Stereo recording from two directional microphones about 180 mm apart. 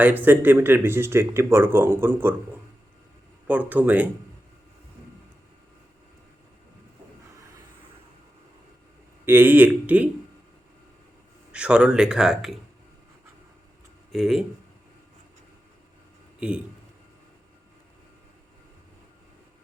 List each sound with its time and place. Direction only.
0.0 s speech: 10° right (ahead or behind)
3.4 s speech: 10° right (ahead or behind)
9.2 s speech: 10° right (ahead or behind)
11.5 s speech: 5° right (ahead or behind)
14.1 s speech: centre (ahead or behind)